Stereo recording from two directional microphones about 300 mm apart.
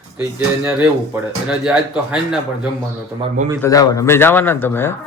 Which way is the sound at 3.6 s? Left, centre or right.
Centre.